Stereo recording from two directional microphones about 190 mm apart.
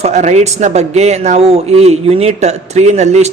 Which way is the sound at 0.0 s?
40° right (ahead or behind).